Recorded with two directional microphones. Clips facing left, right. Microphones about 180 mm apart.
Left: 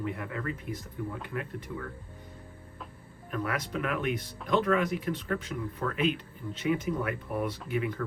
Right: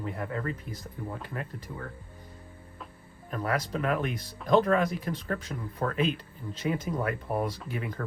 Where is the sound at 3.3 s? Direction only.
35° right (ahead or behind).